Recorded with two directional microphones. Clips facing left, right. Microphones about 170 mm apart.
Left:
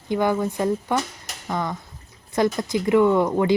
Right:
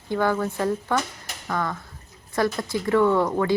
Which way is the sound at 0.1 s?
15° left (ahead or behind).